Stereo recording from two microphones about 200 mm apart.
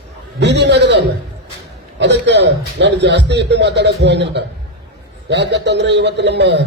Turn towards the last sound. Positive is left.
turn(degrees=-60)  # may be behind; listen again after turning